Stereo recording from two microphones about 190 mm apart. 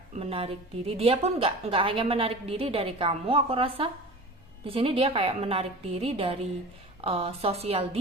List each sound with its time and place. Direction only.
0.1 s a woman's voice: 30° right (ahead or behind)